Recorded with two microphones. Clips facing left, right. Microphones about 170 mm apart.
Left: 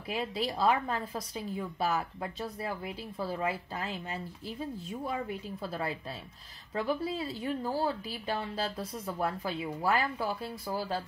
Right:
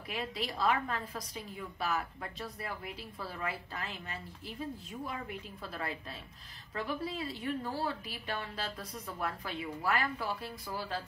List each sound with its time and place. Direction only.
0.1 s a woman's voice: 30° left (ahead or behind)